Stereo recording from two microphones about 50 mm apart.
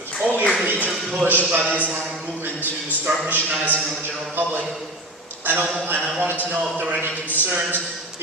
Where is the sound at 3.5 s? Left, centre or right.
Right.